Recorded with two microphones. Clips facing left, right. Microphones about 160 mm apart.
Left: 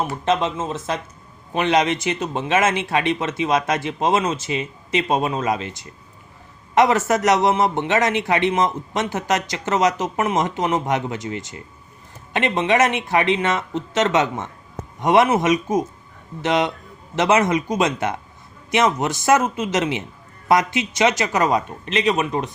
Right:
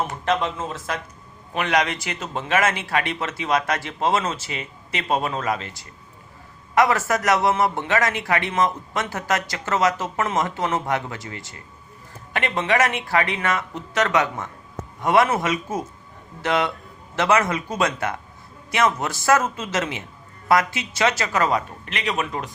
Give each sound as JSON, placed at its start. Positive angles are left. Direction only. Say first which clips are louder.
{"t": 0.1, "sound": "a man's voice", "louder": "left 3 dB", "side_deg": 20}